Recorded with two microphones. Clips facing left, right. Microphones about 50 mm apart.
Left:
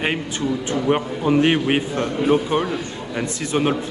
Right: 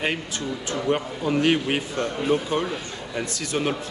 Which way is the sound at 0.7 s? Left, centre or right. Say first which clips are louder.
Left 2 dB; left.